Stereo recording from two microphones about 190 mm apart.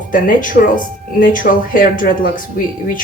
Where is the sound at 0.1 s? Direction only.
45° left (ahead or behind).